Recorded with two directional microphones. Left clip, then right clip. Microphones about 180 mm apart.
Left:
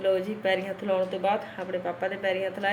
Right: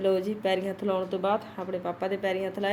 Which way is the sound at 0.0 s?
55° right (ahead or behind).